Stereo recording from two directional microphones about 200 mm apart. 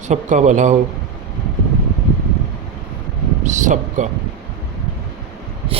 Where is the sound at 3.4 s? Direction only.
40° right (ahead or behind).